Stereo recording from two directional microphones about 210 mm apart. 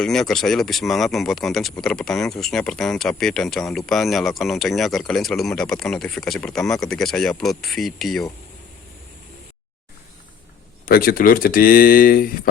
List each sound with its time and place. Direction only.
0.0 s speech: 5° left (ahead or behind)
10.8 s speech: 45° left (ahead or behind)